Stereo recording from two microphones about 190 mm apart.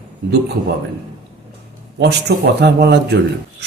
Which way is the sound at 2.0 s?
60° right (ahead or behind).